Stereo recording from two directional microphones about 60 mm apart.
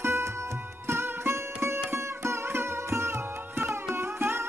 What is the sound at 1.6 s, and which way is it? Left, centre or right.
Sitar, right.